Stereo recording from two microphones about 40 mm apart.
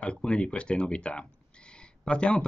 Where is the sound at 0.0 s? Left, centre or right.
Left.